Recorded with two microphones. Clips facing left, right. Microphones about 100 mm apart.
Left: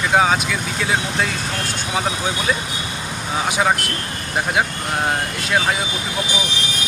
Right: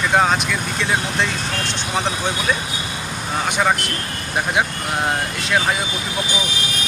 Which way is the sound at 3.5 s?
5° left (ahead or behind).